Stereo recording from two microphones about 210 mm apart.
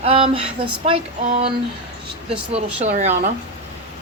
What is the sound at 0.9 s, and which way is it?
Speech, 25° right (ahead or behind).